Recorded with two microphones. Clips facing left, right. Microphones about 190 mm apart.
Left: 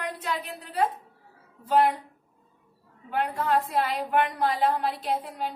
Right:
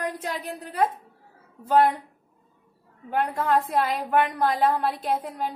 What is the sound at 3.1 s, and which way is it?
A woman's voice, 50° right (ahead or behind).